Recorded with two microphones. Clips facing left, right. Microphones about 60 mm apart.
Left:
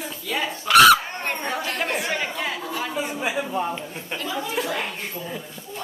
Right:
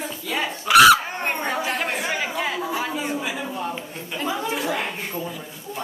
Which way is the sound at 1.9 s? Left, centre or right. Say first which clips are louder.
Even; centre.